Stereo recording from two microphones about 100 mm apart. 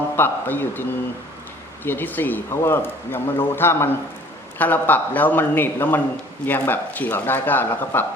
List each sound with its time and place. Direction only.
0.2 s speech: 20° left (ahead or behind)